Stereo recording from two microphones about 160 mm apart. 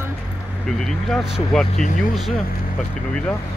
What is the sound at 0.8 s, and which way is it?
Speech, centre (ahead or behind).